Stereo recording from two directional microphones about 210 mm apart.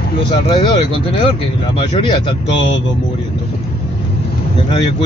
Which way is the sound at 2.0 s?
20° left (ahead or behind).